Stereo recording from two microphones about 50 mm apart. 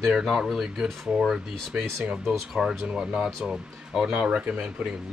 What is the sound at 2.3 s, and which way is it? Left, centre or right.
Speech, centre.